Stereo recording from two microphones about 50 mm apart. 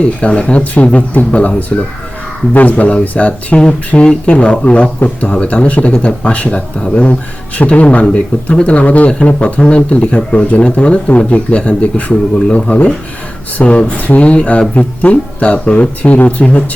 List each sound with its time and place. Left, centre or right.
0.0 s speech: left